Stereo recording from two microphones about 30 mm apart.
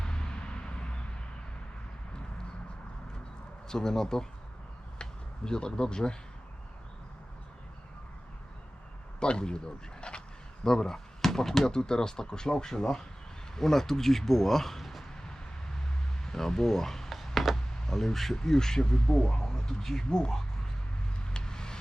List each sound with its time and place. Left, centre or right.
0.0 s a sound: left
3.7 s speech: left
5.5 s speech: left
9.2 s speech: left
10.0 s a sound: left
10.7 s speech: centre
16.2 s speech: centre
17.5 s a sound: centre
18.3 s speech: left
19.4 s speech: centre
20.1 s speech: left
21.3 s vehicle: left